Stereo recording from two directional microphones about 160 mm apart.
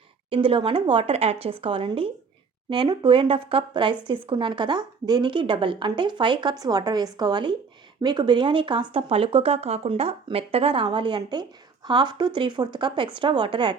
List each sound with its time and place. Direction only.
0.3 s a woman's voice: 35° right (ahead or behind)